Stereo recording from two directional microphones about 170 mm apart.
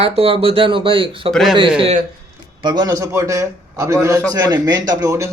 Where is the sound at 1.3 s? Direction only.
Centre (ahead or behind).